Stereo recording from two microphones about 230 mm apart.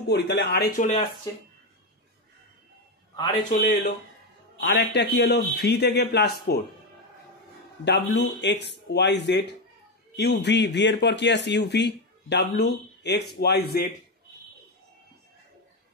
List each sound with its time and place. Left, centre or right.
0.1 s speech: left
1.3 s speech: centre
3.4 s speech: left
4.6 s speech: left
7.8 s speech: left